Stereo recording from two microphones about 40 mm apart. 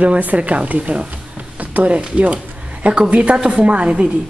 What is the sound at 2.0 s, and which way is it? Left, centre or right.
A woman's voice, right.